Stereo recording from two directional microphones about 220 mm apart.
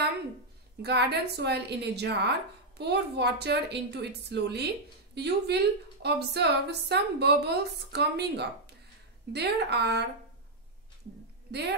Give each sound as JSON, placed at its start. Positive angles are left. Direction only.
{"t": 0.8, "sound": "a woman's voice", "side_deg": -50}